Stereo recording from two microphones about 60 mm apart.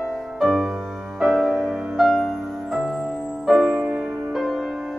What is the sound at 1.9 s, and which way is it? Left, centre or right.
Music, centre.